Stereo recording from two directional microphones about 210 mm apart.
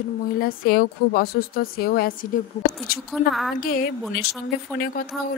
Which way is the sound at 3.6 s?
45° left (ahead or behind).